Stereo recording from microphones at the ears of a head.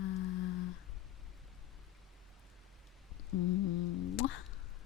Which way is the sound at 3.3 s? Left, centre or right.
Left.